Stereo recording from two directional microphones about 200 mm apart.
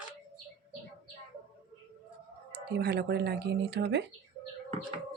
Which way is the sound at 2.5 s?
55° right (ahead or behind).